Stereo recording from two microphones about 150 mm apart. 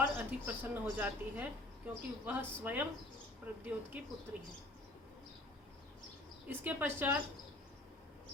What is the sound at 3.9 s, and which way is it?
Speech, 10° right (ahead or behind).